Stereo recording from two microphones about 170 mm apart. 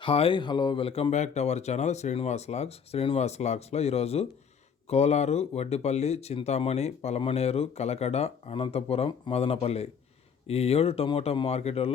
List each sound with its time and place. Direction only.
0.0 s speech: 30° left (ahead or behind)